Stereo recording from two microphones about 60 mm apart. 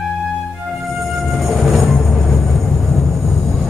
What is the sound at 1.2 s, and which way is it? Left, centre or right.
Train, centre.